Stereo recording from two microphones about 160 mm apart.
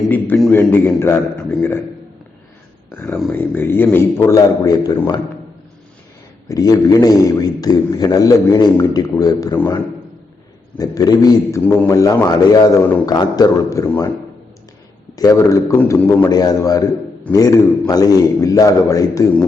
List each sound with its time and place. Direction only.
0.5 s a man's voice: 15° left (ahead or behind)
2.9 s a man's voice: 10° left (ahead or behind)
6.5 s a man's voice: 20° left (ahead or behind)
10.8 s a man's voice: 25° left (ahead or behind)
15.1 s a man's voice: 20° left (ahead or behind)